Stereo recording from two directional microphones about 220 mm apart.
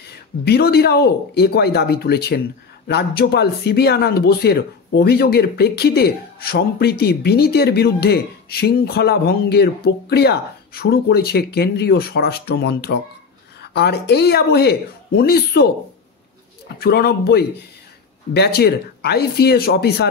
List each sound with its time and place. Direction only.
0.0 s speech: 45° left (ahead or behind)